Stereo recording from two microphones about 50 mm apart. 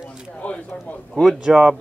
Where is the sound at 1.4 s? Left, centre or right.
Centre.